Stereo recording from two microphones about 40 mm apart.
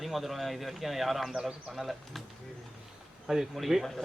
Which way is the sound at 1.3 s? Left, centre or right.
Centre.